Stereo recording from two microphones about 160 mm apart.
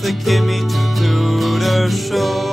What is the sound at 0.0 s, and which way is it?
Music, centre (ahead or behind).